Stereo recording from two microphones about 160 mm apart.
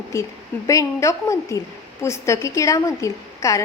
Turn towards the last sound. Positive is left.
turn(degrees=20)  # may be behind; listen again after turning